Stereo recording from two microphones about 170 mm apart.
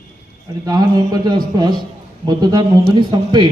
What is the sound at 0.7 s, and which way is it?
A man's voice, 25° right (ahead or behind).